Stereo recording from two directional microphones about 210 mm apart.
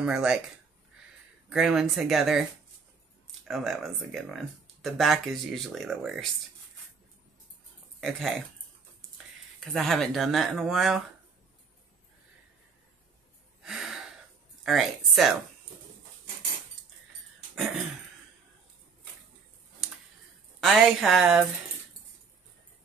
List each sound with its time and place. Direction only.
0.0 s speech: 5° right (ahead or behind)
1.5 s speech: 5° right (ahead or behind)
3.4 s speech: centre (ahead or behind)
8.0 s speech: centre (ahead or behind)
9.7 s speech: centre (ahead or behind)
13.6 s gasp: centre (ahead or behind)
14.6 s speech: centre (ahead or behind)
20.6 s speech: centre (ahead or behind)